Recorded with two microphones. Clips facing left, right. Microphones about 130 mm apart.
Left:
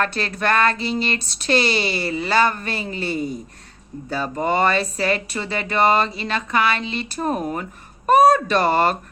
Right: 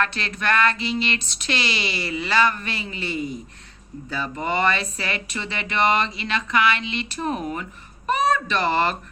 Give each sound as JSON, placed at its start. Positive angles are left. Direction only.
{"t": 0.0, "sound": "speech", "side_deg": 40}